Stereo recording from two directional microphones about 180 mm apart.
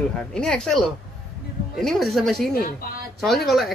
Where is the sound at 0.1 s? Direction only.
5° left (ahead or behind).